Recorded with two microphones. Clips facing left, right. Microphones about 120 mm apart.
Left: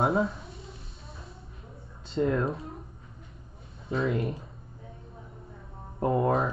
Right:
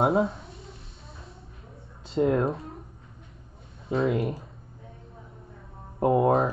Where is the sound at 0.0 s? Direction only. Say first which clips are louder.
Right 3 dB; 25° right (ahead or behind).